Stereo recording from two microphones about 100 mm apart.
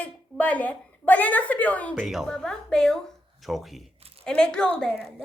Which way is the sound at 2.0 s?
5° right (ahead or behind).